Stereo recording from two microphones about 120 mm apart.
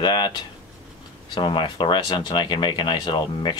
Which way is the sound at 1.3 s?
40° left (ahead or behind).